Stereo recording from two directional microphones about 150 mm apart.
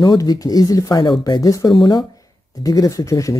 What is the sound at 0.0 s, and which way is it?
Speech, 25° left (ahead or behind).